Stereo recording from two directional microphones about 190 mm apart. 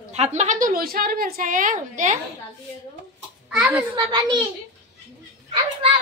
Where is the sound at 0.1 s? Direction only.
35° right (ahead or behind).